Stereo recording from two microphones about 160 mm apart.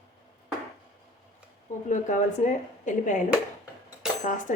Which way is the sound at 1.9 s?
50° left (ahead or behind).